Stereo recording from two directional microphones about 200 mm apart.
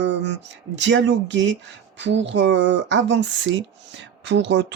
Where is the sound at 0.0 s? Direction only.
60° right (ahead or behind).